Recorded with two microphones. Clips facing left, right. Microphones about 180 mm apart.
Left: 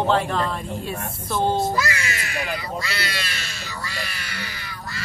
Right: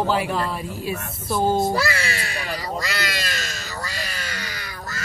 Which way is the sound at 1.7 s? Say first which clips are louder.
Right 2 dB; 35° right (ahead or behind).